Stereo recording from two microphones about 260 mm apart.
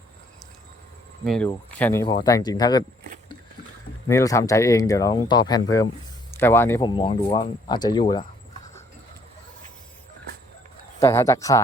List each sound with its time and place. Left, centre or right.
1.2 s speech: centre
4.0 s speech: centre
11.0 s speech: centre